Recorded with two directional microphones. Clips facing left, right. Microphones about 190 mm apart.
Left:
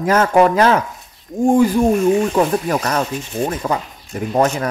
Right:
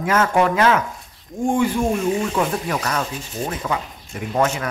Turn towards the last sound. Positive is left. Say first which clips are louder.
# left 4 dB
turn(degrees=35)  # may be behind; listen again after turning